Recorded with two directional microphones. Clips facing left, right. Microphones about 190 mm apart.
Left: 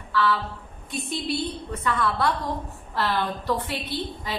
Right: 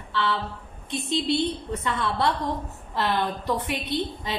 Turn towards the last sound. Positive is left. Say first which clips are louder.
# right 3 dB
turn(degrees=-20)  # may be behind; listen again after turning